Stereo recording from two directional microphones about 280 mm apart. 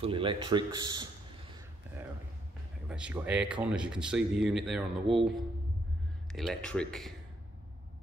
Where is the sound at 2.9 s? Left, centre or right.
Centre.